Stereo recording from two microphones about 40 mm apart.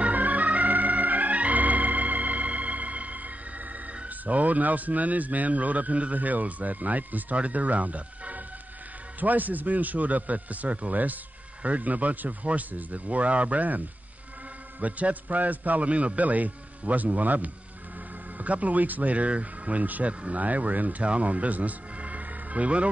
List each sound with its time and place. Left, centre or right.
0.0 s organ: right
4.3 s a man's voice: right